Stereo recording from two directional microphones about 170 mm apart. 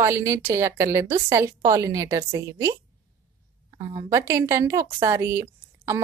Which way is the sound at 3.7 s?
20° right (ahead or behind).